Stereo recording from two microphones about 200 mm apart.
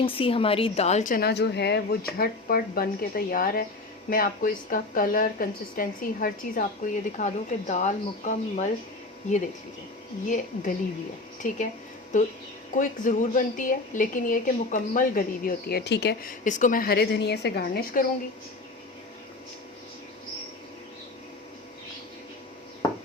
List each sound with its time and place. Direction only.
0.0 s a woman's voice: 25° left (ahead or behind)
10.2 s speech: 40° left (ahead or behind)
12.7 s a woman's voice: 40° left (ahead or behind)
16.4 s a woman's voice: 40° left (ahead or behind)